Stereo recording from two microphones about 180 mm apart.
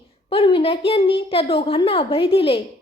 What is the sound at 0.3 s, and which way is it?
A woman's voice, 30° left (ahead or behind).